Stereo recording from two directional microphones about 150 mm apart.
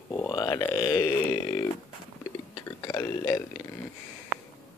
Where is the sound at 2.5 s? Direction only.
25° left (ahead or behind).